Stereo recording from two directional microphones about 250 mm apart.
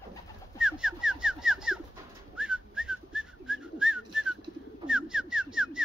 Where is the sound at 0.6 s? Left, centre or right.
Centre.